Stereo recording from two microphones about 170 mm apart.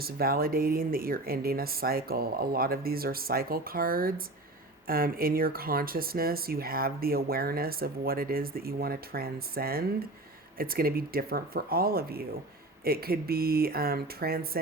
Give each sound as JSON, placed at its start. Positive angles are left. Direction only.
{"t": 0.0, "sound": "speech", "side_deg": -60}